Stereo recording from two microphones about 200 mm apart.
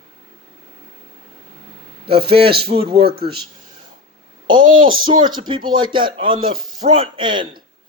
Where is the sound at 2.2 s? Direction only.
30° right (ahead or behind).